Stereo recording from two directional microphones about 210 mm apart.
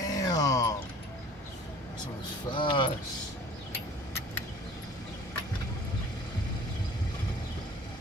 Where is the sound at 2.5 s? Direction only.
25° left (ahead or behind).